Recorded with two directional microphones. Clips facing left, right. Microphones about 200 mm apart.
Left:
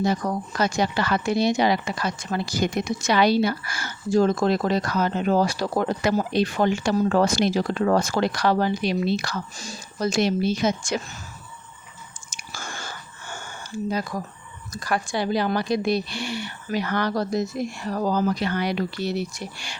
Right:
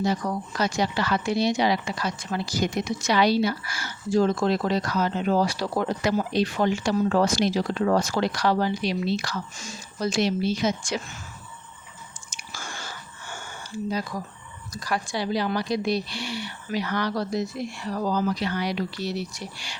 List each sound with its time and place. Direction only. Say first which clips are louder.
0.0 s speech: left 2 dB; 50° left (ahead or behind)
9.6 s speech: left 2 dB; 40° left (ahead or behind)
12.3 s a sound: left 2 dB; 45° left (ahead or behind)
14.7 s speech: left 3 dB; 55° left (ahead or behind)